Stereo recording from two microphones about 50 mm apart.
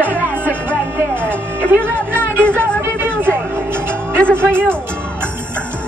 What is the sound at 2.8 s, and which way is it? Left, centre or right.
Music, right.